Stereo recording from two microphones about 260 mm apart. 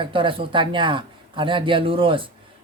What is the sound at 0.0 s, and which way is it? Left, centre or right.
Speech, centre.